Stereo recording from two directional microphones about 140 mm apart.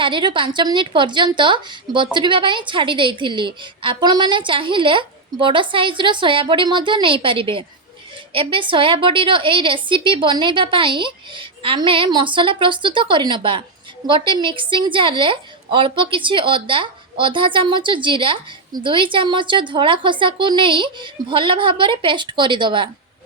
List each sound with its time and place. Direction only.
0.0 s a woman's voice: 35° right (ahead or behind)